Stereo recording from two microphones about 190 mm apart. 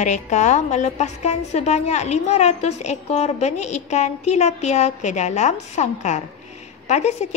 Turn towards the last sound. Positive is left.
turn(degrees=35)  # may be behind; listen again after turning